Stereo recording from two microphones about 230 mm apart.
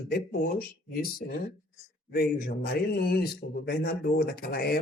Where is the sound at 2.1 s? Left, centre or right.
Left.